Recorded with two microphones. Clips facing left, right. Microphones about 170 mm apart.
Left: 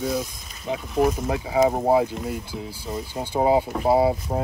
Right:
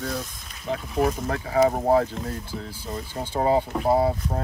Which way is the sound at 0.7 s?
Centre (ahead or behind).